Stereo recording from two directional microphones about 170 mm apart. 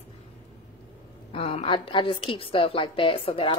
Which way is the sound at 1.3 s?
35° left (ahead or behind).